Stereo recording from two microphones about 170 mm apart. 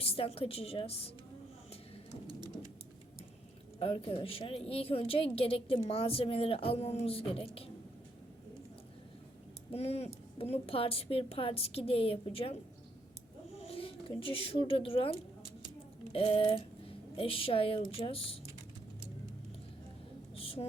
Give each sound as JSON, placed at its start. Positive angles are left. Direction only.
{"t": 0.0, "sound": "a woman's voice", "side_deg": 35}
{"t": 3.8, "sound": "a woman's voice", "side_deg": 30}
{"t": 9.7, "sound": "a woman's voice", "side_deg": 35}
{"t": 13.6, "sound": "a woman's voice", "side_deg": 35}
{"t": 20.3, "sound": "a sound", "side_deg": 35}